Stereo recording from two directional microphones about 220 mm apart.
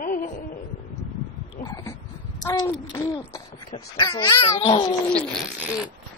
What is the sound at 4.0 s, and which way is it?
Speech, 20° left (ahead or behind).